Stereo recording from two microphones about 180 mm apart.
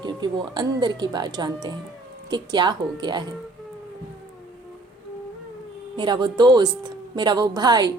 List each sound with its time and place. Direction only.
0.0 s speech: 25° right (ahead or behind)
6.0 s speech: 25° right (ahead or behind)